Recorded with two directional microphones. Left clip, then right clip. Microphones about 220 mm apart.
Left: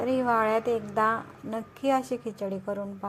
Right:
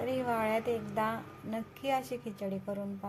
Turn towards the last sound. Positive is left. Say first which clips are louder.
# left 6 dB
turn(degrees=20)  # may be behind; listen again after turning